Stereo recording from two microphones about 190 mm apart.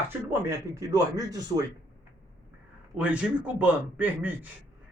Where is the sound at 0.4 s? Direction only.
15° right (ahead or behind).